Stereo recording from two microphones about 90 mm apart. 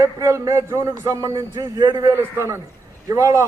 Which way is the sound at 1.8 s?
50° right (ahead or behind).